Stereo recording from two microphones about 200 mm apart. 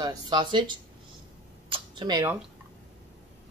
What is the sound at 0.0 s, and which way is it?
Speech, 20° right (ahead or behind).